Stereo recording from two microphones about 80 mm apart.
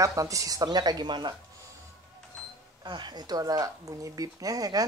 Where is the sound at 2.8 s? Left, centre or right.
Right.